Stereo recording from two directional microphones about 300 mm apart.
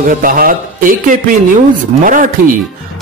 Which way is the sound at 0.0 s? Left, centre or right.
Right.